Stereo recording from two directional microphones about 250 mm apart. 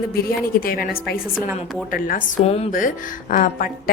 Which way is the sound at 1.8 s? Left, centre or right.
Left.